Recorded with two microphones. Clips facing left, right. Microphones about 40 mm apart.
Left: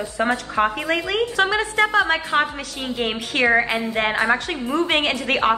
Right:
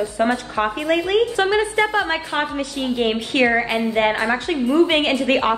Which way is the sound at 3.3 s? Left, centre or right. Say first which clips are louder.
Left 1 dB; centre.